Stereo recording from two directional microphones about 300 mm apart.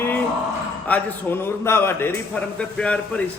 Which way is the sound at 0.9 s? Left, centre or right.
Centre.